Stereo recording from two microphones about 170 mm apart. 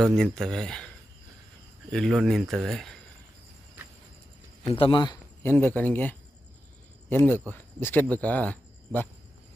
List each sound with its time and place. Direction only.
0.2 s speech: centre (ahead or behind)
1.9 s speech: centre (ahead or behind)
4.7 s speech: 30° left (ahead or behind)
5.4 s speech: 15° left (ahead or behind)